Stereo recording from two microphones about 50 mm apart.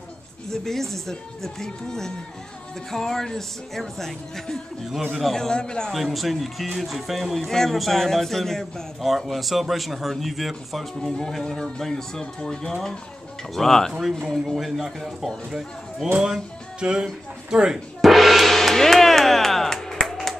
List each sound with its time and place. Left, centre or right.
0.5 s speech: centre
5.9 s speech: centre
16.8 s speech: centre
18.0 s gong: centre